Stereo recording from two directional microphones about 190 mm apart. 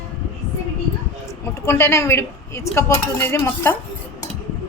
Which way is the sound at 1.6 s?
15° left (ahead or behind).